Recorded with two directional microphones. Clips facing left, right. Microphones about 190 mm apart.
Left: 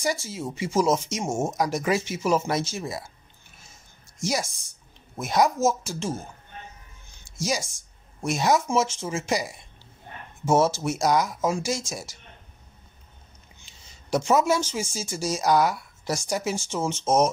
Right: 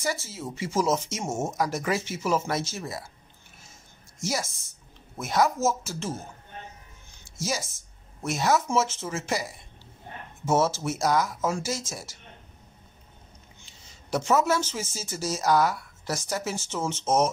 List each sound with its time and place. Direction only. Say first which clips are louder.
0.0 s speech: left 3 dB; 15° left (ahead or behind)
4.2 s speech: left 3 dB; 15° left (ahead or behind)
7.2 s a woman's voice: left 3 dB; 15° left (ahead or behind)
14.1 s speech: left 2 dB; 15° left (ahead or behind)